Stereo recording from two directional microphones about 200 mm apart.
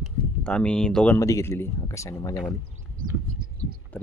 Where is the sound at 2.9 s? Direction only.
45° right (ahead or behind).